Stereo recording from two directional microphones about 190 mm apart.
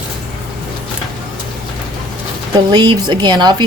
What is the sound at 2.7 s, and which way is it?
Speech, 20° right (ahead or behind).